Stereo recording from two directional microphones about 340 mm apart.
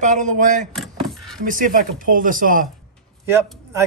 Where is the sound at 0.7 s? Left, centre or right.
Centre.